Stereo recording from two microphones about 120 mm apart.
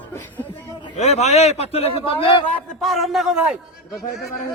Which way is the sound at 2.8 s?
Centre (ahead or behind).